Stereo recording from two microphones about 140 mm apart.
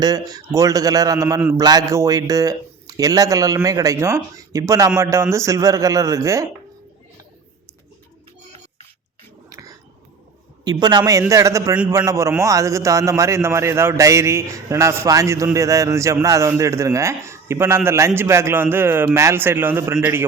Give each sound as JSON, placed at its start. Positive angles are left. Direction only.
{"t": 0.0, "sound": "speech", "side_deg": -25}
{"t": 9.5, "sound": "whispering", "side_deg": -25}
{"t": 10.6, "sound": "a man's voice", "side_deg": -30}